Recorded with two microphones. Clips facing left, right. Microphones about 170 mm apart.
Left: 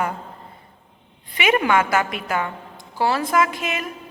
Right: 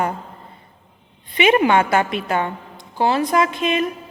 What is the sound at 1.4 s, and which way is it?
A woman's voice, 30° right (ahead or behind).